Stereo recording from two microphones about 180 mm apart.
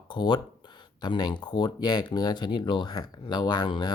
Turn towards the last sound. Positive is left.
turn(degrees=25)  # may be behind; listen again after turning